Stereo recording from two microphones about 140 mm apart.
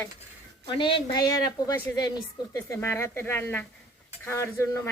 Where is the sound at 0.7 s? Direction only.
35° left (ahead or behind).